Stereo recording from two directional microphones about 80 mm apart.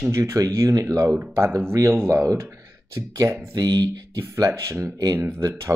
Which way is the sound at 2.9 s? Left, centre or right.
Right.